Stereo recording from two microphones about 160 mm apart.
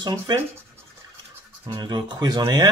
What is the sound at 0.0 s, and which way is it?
Speech, 25° right (ahead or behind).